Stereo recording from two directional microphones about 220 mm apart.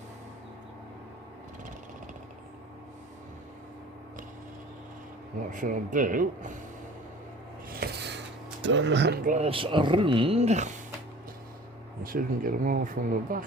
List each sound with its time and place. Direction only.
5.5 s speech: 35° right (ahead or behind)
7.8 s a sound: 50° right (ahead or behind)
8.6 s speech: 55° right (ahead or behind); by 10.7 s 30° right (ahead or behind)
12.0 s speech: 40° right (ahead or behind)